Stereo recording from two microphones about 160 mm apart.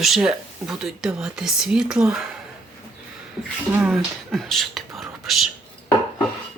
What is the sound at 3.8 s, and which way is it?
Speech, 5° right (ahead or behind).